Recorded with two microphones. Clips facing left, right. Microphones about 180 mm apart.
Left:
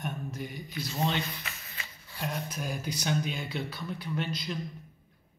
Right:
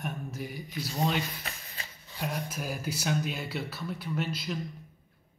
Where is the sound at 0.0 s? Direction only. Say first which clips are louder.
Even; 5° right (ahead or behind).